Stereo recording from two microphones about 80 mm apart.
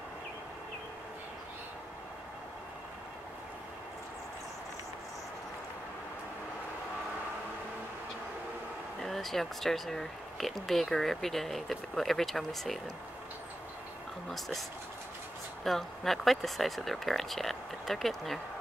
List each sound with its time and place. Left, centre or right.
9.0 s speech: centre
15.6 s speech: centre